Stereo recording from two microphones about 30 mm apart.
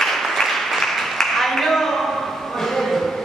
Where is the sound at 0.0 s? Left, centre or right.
Centre.